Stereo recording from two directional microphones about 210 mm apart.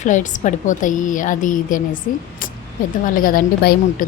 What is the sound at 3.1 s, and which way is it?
A woman's voice, 40° left (ahead or behind).